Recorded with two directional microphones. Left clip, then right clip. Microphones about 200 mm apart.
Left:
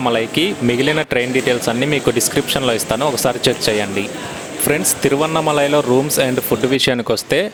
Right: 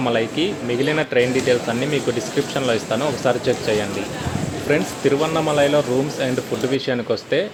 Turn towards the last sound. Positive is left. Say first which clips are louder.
# left 4 dB
turn(degrees=45)  # may be behind; listen again after turning